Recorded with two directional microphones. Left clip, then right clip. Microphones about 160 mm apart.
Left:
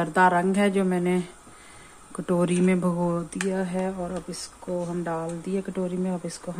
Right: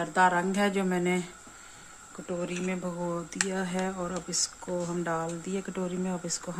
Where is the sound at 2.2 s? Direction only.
45° left (ahead or behind).